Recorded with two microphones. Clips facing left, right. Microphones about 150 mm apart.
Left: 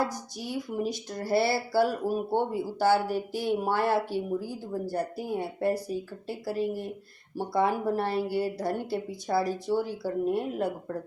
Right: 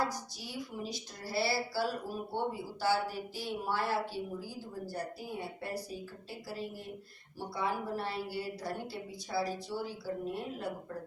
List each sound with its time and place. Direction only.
1.1 s speech: 55° left (ahead or behind)